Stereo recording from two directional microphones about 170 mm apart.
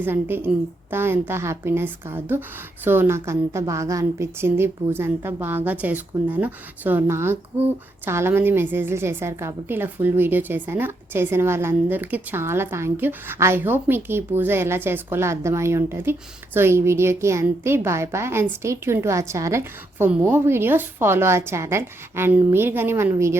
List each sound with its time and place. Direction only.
0.0 s a woman's voice: 10° right (ahead or behind)